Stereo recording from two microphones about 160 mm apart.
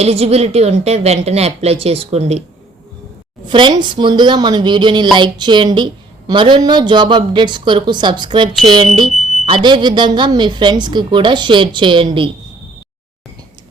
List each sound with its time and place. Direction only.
0.0 s a woman's voice: 40° right (ahead or behind)
3.4 s a woman's voice: 30° right (ahead or behind)